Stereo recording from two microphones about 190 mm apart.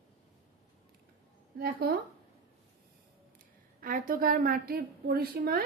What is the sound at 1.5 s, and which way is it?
Speech, 55° right (ahead or behind).